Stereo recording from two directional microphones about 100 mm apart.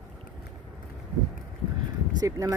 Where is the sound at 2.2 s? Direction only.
35° right (ahead or behind).